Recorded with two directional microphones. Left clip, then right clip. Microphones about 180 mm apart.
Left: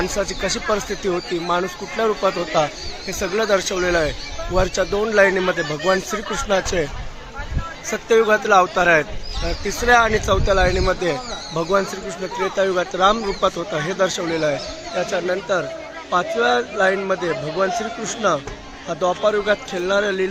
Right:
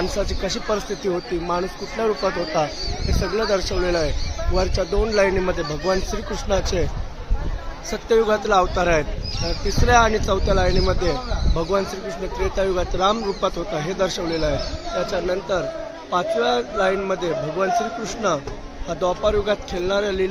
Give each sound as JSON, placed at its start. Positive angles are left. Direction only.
{"t": 0.2, "sound": "speech", "side_deg": 30}
{"t": 7.9, "sound": "speech", "side_deg": 20}
{"t": 9.6, "sound": "speech", "side_deg": 30}